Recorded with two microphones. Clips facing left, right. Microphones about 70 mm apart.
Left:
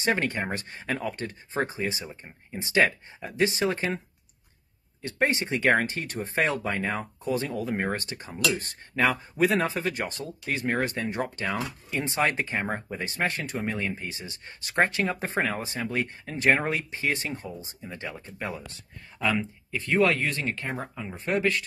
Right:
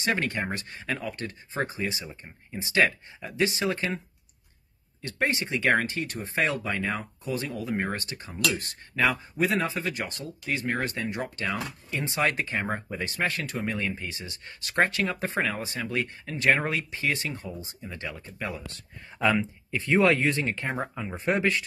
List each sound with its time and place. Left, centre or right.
0.0 s speech: left
5.0 s speech: left
9.0 s speech: left
19.7 s speech: centre